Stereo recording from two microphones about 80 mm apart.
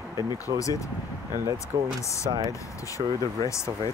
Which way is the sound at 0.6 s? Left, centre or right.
Left.